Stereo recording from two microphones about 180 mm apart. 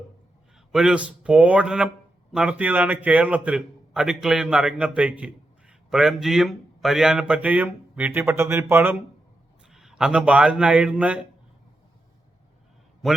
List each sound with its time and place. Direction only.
0.7 s a man's voice: 5° right (ahead or behind)
9.7 s a man's voice: 5° right (ahead or behind)
13.0 s a man's voice: centre (ahead or behind)